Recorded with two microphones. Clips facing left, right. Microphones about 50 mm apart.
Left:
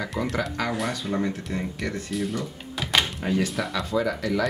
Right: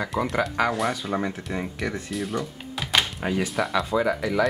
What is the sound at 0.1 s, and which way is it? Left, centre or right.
Speech, centre.